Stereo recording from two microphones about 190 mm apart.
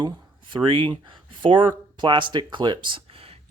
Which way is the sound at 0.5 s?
25° right (ahead or behind).